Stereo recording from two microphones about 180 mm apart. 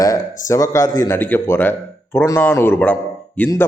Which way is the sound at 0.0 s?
15° left (ahead or behind).